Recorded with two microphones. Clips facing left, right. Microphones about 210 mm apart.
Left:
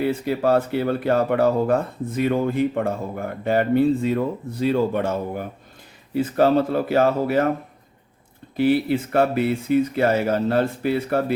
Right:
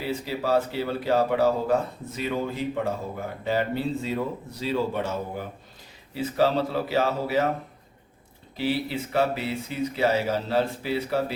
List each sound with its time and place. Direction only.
0.0 s speech: 55° left (ahead or behind)
8.5 s speech: 55° left (ahead or behind)